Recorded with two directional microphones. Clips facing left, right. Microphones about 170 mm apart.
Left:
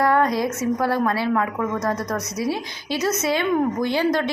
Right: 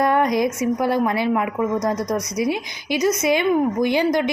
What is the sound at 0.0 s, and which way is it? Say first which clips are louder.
A woman's voice: right 1 dB; 20° right (ahead or behind).